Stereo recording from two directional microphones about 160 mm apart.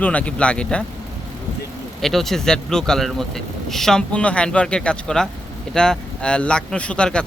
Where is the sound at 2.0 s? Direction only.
Centre (ahead or behind).